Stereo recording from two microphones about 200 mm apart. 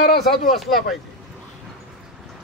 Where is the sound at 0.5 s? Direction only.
Centre (ahead or behind).